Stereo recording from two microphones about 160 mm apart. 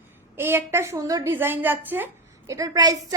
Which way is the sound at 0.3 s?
15° right (ahead or behind).